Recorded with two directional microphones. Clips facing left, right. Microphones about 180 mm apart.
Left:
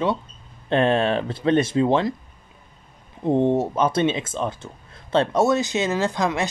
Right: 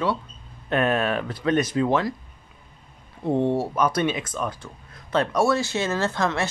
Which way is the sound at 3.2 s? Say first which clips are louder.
Left 3 dB; 20° left (ahead or behind).